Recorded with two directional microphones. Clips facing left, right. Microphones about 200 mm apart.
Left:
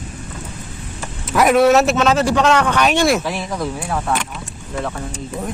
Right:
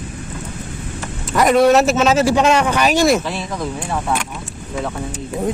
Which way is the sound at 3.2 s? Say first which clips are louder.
Left 1 dB; 10° left (ahead or behind).